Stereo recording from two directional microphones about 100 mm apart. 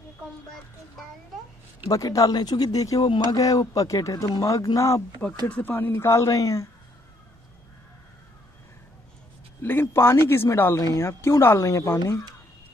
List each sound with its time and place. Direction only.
1.9 s speech: 35° left (ahead or behind)
5.5 s speech: 20° left (ahead or behind); by 6.7 s 35° left (ahead or behind)
9.6 s speech: 25° left (ahead or behind)